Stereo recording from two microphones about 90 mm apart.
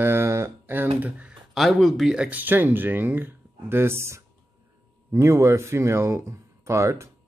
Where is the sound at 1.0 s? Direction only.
10° right (ahead or behind).